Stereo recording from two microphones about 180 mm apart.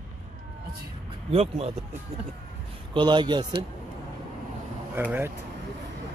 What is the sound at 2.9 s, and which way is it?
Speech, 25° right (ahead or behind).